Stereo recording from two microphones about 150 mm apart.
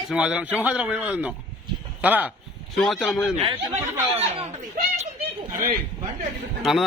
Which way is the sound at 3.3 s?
40° right (ahead or behind).